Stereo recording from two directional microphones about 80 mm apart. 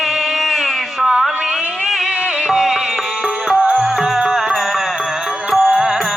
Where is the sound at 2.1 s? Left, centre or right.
Centre.